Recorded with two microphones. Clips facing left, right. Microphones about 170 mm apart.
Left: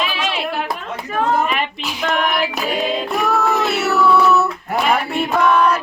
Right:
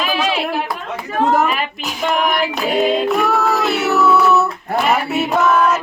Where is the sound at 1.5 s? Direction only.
Centre (ahead or behind).